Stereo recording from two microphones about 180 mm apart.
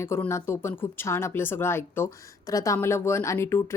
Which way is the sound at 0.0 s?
15° left (ahead or behind).